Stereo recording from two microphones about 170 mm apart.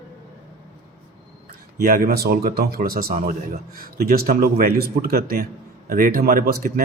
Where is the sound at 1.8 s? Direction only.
60° right (ahead or behind).